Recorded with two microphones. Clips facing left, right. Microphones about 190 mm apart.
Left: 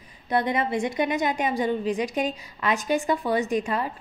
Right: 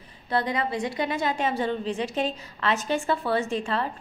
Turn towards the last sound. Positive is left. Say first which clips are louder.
# left 2 dB
turn(degrees=15)  # may be behind; listen again after turning